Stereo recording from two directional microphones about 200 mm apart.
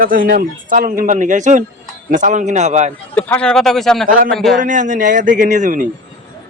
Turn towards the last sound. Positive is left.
turn(degrees=-40)  # may be behind; listen again after turning